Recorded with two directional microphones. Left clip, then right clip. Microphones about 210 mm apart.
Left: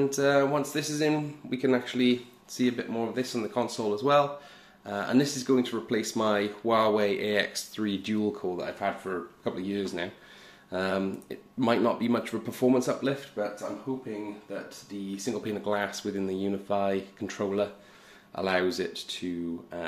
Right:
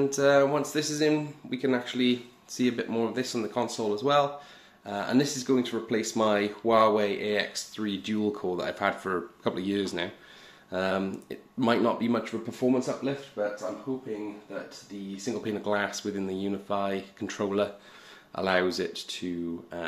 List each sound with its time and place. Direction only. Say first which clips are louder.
0.0 s speech: right 2 dB; centre (ahead or behind)
1.5 s speech: left 2 dB; 15° left (ahead or behind)
2.5 s speech: right 1 dB; 10° right (ahead or behind); by 8.3 s 5° left (ahead or behind)
8.3 s speech: right 2 dB; 10° right (ahead or behind)
10.7 s speech: right 1 dB; centre (ahead or behind)
14.5 s speech: left 1 dB; 20° left (ahead or behind)
15.2 s speech: right 1 dB; 5° right (ahead or behind)
17.2 s speech: right 5 dB; 5° right (ahead or behind)